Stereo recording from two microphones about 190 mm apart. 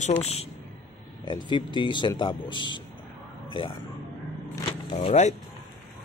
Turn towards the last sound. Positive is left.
turn(degrees=35)  # may be behind; listen again after turning